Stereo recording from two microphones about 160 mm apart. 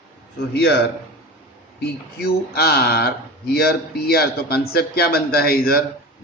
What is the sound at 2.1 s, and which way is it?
Speech, 75° left (ahead or behind).